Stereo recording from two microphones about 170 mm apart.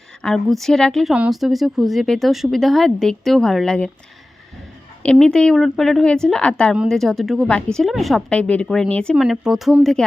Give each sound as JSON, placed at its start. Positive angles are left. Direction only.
{"t": 0.2, "sound": "a woman's voice", "side_deg": 5}
{"t": 5.1, "sound": "a woman's voice", "side_deg": 5}